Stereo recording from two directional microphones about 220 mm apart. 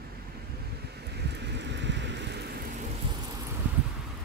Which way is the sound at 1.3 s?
50° right (ahead or behind).